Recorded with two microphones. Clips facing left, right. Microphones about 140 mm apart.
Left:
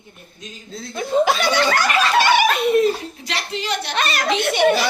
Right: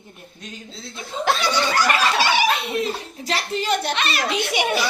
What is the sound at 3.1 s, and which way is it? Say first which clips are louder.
Speech: right 2 dB; 40° right (ahead or behind).